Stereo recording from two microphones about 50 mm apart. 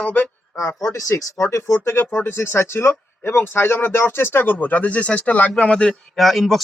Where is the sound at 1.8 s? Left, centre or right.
Left; by 5.9 s centre.